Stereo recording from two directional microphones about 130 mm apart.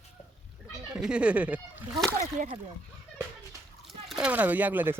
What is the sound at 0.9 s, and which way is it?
Speech, 5° right (ahead or behind).